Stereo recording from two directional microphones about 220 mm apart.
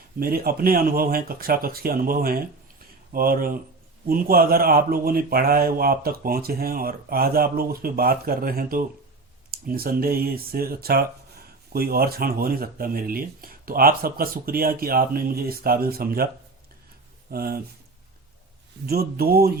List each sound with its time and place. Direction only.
0.2 s speech: 40° right (ahead or behind)
17.3 s speech: 40° right (ahead or behind)
18.9 s speech: 45° right (ahead or behind)